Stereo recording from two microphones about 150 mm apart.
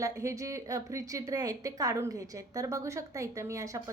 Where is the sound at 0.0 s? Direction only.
20° right (ahead or behind).